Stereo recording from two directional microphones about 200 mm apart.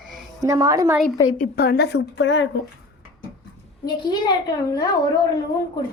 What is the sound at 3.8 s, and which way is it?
A woman's voice, 20° left (ahead or behind).